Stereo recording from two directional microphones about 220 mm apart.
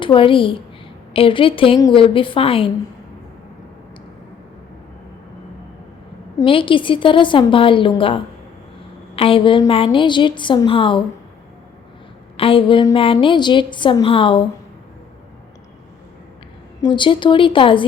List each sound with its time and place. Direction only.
0.0 s a woman's voice: 25° left (ahead or behind)
6.4 s a woman's voice: 25° left (ahead or behind)
12.4 s a woman's voice: 25° left (ahead or behind)
16.8 s a woman's voice: 20° left (ahead or behind)